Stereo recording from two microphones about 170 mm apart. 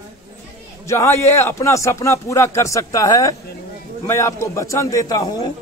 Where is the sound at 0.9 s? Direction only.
15° left (ahead or behind).